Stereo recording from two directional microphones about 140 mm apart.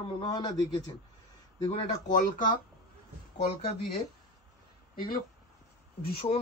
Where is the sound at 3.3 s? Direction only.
50° left (ahead or behind).